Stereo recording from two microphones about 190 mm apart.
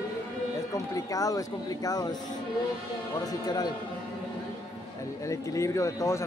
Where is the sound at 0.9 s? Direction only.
20° left (ahead or behind).